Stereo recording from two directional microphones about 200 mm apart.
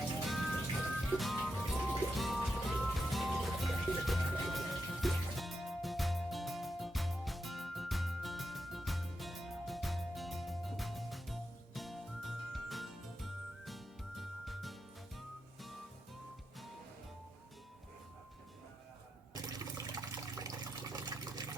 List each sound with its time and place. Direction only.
0.3 s music: centre (ahead or behind)
19.3 s water: 20° right (ahead or behind)